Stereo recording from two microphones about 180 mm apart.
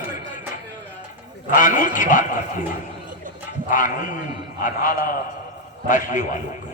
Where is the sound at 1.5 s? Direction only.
45° left (ahead or behind).